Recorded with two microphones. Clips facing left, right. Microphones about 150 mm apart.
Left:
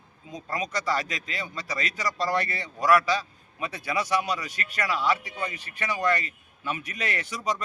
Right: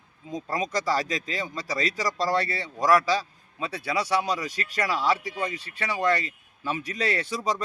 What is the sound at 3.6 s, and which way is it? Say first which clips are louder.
Speech: right 1 dB; 30° right (ahead or behind).